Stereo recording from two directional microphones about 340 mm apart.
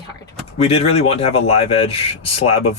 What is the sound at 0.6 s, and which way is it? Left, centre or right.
Speech, centre.